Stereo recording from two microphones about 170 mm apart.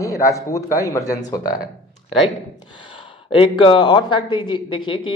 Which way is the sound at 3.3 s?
30° left (ahead or behind).